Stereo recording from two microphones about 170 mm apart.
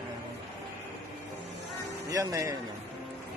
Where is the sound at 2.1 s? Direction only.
20° right (ahead or behind).